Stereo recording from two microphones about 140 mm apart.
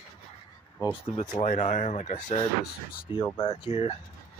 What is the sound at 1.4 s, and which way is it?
Speech, 65° left (ahead or behind).